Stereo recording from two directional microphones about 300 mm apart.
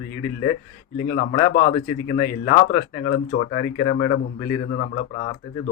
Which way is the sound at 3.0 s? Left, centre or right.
Left.